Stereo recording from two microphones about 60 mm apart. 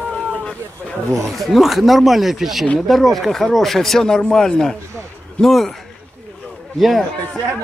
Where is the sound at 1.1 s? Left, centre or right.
Centre.